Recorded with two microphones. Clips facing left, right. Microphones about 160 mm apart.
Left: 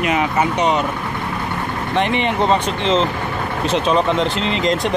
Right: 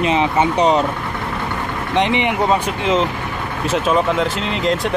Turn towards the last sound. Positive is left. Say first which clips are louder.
# left 1 dB
turn(degrees=-5)  # may be behind; listen again after turning